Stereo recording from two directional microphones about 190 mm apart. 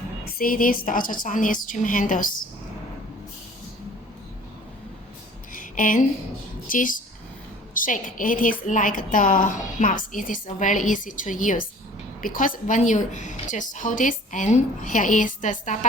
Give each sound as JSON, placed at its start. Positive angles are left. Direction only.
{"t": 0.3, "sound": "a woman's voice", "side_deg": 50}
{"t": 5.5, "sound": "a sound", "side_deg": 45}
{"t": 6.7, "sound": "a woman's voice", "side_deg": 45}